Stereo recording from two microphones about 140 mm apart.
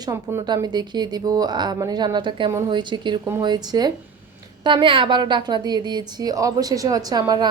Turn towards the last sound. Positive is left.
turn(degrees=-30)  # may be behind; listen again after turning